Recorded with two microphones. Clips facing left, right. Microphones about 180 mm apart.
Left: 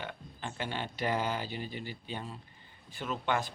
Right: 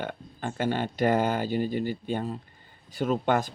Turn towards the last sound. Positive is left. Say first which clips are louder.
# right 8 dB
turn(degrees=-45)  # may be behind; listen again after turning